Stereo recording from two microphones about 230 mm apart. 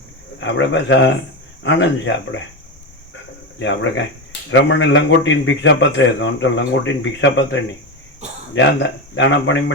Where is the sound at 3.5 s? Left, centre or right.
Left.